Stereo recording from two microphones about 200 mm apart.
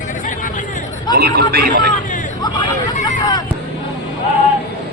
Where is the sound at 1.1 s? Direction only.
50° right (ahead or behind).